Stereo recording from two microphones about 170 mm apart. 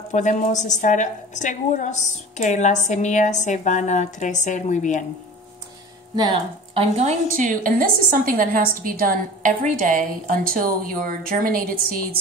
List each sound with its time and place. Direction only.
0.1 s a woman's voice: 45° left (ahead or behind)
6.1 s speech: 25° right (ahead or behind)
7.0 s a woman's voice: 45° right (ahead or behind)